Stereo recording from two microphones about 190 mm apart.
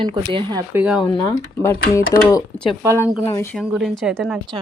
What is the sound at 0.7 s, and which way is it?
Speech, 5° right (ahead or behind).